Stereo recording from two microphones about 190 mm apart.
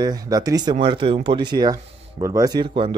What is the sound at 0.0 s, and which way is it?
Speech, 20° right (ahead or behind).